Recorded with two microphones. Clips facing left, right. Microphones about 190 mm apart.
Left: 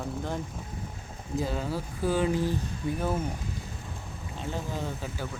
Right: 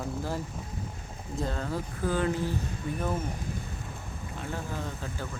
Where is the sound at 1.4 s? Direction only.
10° left (ahead or behind).